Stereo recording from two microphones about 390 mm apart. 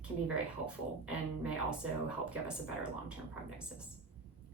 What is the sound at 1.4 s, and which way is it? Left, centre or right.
Speech, centre.